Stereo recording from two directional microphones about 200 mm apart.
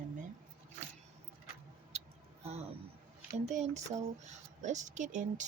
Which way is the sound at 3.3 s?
35° right (ahead or behind).